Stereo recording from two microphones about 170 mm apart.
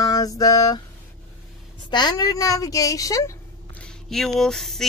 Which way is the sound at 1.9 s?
25° left (ahead or behind).